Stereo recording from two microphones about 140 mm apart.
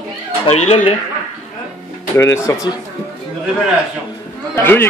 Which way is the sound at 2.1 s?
20° left (ahead or behind).